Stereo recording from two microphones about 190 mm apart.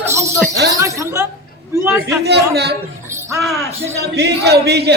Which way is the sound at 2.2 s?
60° right (ahead or behind).